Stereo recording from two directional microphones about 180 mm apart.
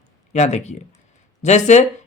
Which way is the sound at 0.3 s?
40° left (ahead or behind).